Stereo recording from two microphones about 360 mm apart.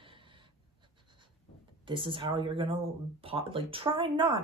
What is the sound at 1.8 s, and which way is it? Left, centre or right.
Speech, centre.